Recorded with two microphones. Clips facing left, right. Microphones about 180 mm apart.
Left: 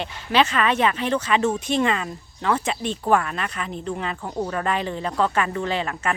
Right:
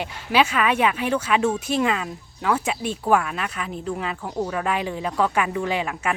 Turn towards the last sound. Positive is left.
turn(degrees=-10)  # may be behind; listen again after turning